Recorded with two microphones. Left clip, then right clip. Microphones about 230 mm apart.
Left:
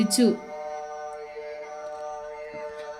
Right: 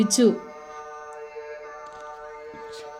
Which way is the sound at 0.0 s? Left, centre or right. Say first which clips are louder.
Right 3 dB; centre.